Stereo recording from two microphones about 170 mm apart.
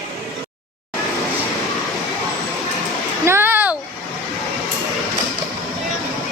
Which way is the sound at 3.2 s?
15° right (ahead or behind).